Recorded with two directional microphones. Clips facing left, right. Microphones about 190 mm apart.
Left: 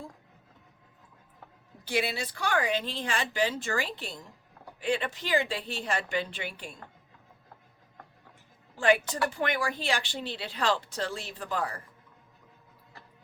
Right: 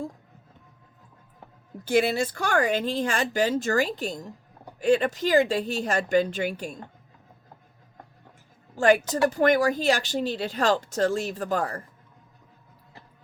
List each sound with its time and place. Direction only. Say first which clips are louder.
1.8 s speech: right 8 dB; 45° right (ahead or behind)
8.7 s a woman's voice: right 5 dB; 45° right (ahead or behind)